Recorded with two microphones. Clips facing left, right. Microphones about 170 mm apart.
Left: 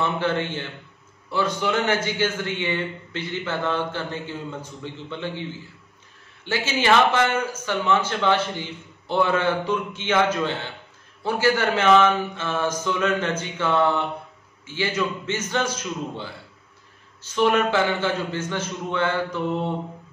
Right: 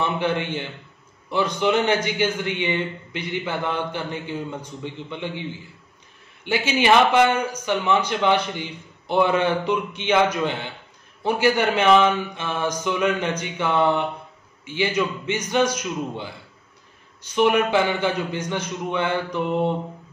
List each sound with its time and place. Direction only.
0.0 s a man's voice: 15° right (ahead or behind)